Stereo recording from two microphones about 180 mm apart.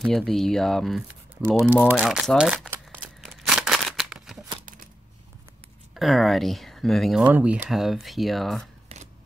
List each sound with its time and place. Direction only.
0.0 s speech: centre (ahead or behind)
3.4 s scissors: centre (ahead or behind)
5.9 s speech: centre (ahead or behind)
8.8 s a sound: 35° right (ahead or behind)